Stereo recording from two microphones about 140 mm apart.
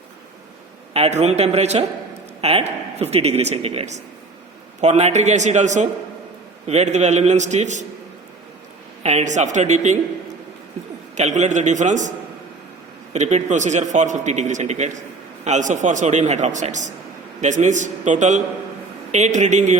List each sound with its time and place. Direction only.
0.9 s a man's voice: 50° right (ahead or behind)
9.0 s a man's voice: 55° right (ahead or behind)
11.1 s a man's voice: 55° right (ahead or behind)
13.1 s a man's voice: 55° right (ahead or behind)